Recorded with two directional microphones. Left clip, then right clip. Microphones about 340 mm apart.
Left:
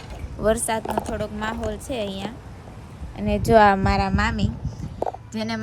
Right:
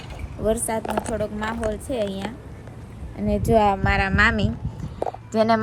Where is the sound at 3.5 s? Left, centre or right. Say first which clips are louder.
Left 3 dB; left; by 5.6 s centre.